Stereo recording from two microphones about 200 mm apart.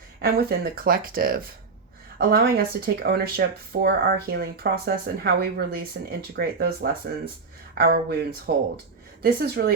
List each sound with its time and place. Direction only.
0.2 s speech: 50° right (ahead or behind)
7.8 s speech: 50° right (ahead or behind)